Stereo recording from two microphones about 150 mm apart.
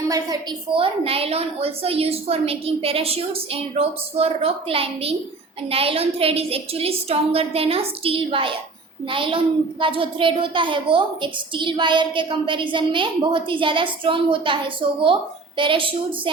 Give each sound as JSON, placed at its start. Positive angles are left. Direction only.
{"t": 0.1, "sound": "a child's voice", "side_deg": -30}